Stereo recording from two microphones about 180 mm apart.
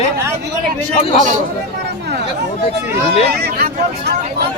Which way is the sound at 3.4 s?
60° right (ahead or behind).